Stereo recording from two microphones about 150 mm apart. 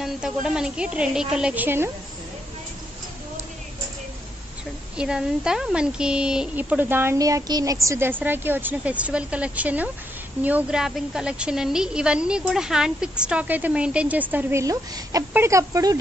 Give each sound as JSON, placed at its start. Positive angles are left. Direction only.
{"t": 0.0, "sound": "a woman's voice", "side_deg": -5}
{"t": 4.9, "sound": "speech", "side_deg": -5}